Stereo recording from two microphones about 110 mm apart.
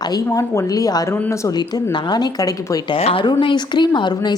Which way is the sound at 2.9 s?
60° left (ahead or behind).